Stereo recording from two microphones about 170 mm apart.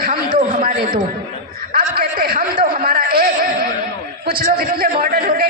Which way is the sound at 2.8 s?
60° right (ahead or behind).